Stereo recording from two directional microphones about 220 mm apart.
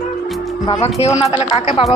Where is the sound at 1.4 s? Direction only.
30° left (ahead or behind).